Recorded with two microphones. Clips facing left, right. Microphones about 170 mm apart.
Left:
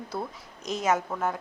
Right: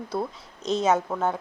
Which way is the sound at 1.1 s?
15° right (ahead or behind).